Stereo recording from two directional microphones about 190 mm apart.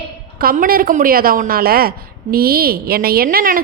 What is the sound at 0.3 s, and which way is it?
A woman's voice, 50° right (ahead or behind).